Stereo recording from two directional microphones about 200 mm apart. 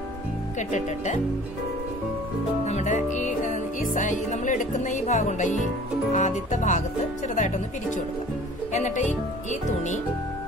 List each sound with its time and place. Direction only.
0.6 s speech: 35° left (ahead or behind)
2.6 s music: 35° left (ahead or behind)
6.1 s speech: 35° left (ahead or behind)